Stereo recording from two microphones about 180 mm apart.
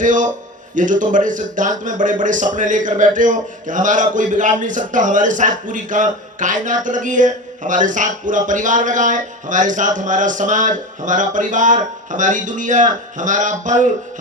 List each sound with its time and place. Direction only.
0.0 s a man's voice: 45° right (ahead or behind)